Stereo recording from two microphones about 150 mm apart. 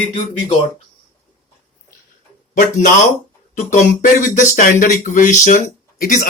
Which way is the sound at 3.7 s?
55° left (ahead or behind).